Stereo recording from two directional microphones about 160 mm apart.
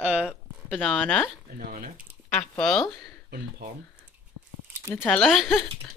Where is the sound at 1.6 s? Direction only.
65° right (ahead or behind).